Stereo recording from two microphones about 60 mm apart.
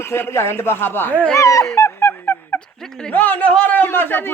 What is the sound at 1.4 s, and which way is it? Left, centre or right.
Speech, left.